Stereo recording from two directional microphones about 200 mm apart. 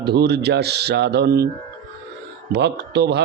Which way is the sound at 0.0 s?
55° right (ahead or behind).